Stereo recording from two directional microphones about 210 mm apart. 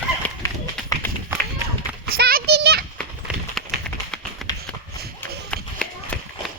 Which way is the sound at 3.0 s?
Centre (ahead or behind).